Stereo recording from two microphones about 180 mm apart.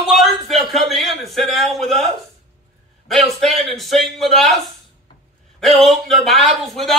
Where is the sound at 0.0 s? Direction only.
Centre (ahead or behind).